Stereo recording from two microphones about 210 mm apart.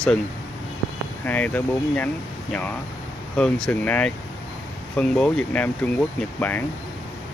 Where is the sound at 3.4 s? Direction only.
5° left (ahead or behind).